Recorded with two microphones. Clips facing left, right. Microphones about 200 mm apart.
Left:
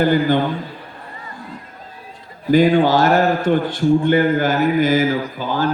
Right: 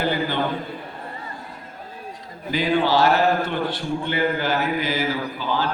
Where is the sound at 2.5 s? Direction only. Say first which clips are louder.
Left 7 dB; 50° left (ahead or behind).